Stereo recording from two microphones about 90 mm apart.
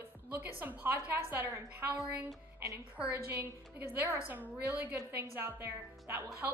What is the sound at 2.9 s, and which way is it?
Speech, 15° right (ahead or behind).